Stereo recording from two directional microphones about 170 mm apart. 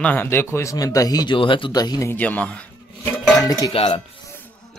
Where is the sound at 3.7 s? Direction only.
35° left (ahead or behind).